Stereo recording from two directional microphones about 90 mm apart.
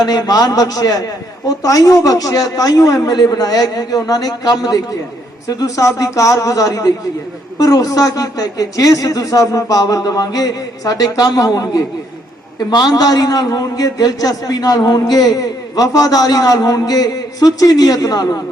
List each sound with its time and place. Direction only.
0.0 s a man's voice: 50° left (ahead or behind)